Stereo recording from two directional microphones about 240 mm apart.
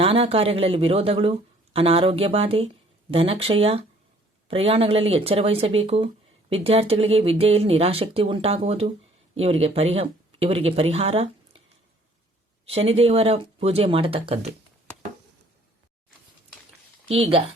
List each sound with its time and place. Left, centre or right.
0.0 s speech: right
12.6 s speech: right
17.1 s speech: right